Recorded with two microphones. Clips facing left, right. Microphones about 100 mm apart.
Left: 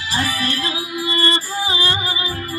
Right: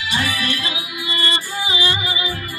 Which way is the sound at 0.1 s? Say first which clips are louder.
Left 1 dB; 35° left (ahead or behind).